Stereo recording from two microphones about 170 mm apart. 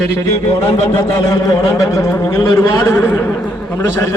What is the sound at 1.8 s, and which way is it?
A man's voice, 20° left (ahead or behind).